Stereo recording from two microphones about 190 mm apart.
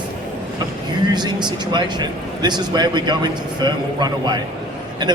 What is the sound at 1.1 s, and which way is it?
A man's voice, 25° right (ahead or behind).